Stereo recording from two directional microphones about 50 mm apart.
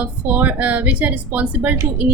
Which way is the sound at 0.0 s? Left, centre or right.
Right.